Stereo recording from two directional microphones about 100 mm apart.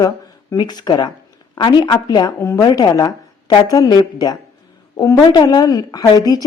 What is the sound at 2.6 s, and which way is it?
A woman's voice, 40° left (ahead or behind).